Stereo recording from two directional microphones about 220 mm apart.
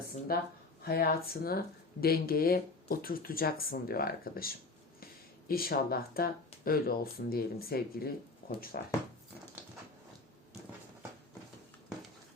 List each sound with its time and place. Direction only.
0.3 s speech: 40° left (ahead or behind)